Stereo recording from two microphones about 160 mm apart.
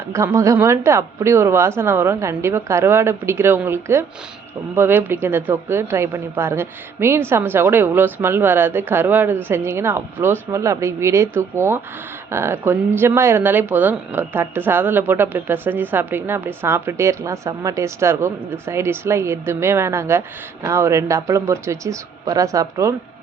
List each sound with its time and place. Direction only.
0.1 s speech: 20° right (ahead or behind)